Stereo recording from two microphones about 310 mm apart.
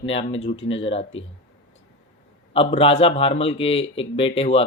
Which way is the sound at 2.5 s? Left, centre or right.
Centre.